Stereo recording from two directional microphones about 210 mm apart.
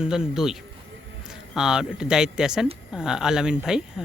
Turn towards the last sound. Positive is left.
turn(degrees=-5)  # may be behind; listen again after turning